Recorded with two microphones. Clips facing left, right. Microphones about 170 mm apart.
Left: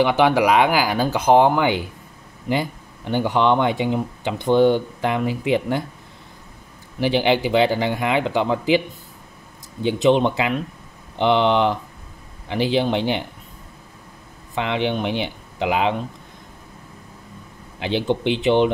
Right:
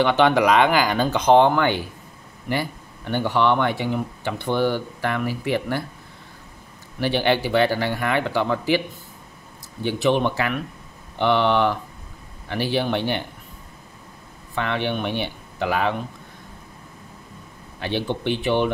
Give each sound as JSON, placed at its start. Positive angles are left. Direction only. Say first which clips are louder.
{"t": 0.0, "sound": "speech", "louder": "left 1 dB", "side_deg": 10}
{"t": 7.0, "sound": "speech", "louder": "left 2 dB", "side_deg": 15}
{"t": 9.8, "sound": "speech", "louder": "left 4 dB", "side_deg": 20}
{"t": 14.5, "sound": "speech", "louder": "left 2 dB", "side_deg": 15}
{"t": 17.7, "sound": "speech", "louder": "left 4 dB", "side_deg": 15}